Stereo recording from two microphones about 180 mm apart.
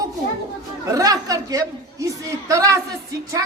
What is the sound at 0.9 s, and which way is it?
A woman's voice, 20° right (ahead or behind).